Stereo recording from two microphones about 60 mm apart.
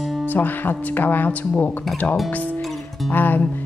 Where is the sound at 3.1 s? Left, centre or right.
Left.